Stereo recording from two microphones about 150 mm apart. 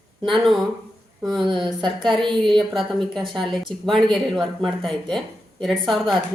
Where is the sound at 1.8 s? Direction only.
30° right (ahead or behind).